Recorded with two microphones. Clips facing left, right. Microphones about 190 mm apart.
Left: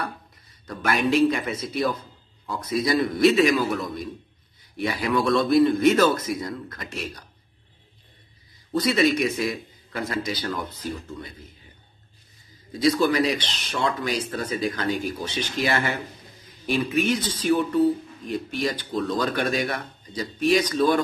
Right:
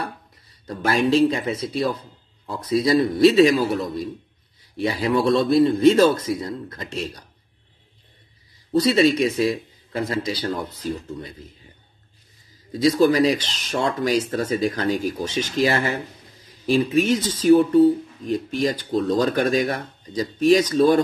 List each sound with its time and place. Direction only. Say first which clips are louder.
0.7 s a man's voice: right 3 dB; 30° right (ahead or behind)
8.7 s speech: right 4 dB; 35° right (ahead or behind)
12.7 s speech: right 4 dB; 40° right (ahead or behind)